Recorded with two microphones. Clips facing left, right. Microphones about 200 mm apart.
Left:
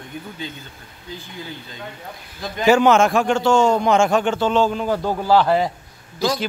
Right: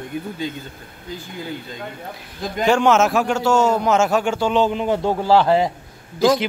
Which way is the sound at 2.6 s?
5° left (ahead or behind).